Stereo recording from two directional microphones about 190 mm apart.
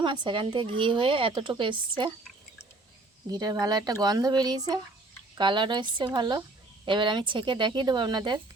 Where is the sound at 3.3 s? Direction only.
20° right (ahead or behind).